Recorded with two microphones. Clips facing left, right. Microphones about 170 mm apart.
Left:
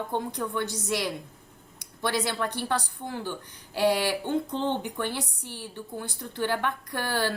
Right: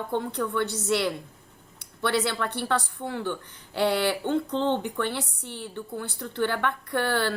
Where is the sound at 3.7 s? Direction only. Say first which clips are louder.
Even; 10° left (ahead or behind).